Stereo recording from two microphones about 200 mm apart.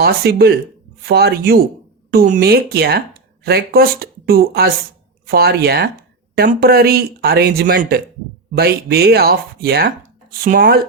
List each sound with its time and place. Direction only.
0.0 s speech: 50° right (ahead or behind)